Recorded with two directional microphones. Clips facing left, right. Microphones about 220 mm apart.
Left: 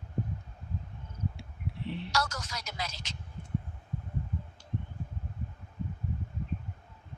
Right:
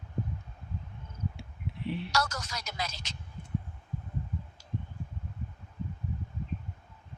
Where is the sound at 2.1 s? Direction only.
40° right (ahead or behind).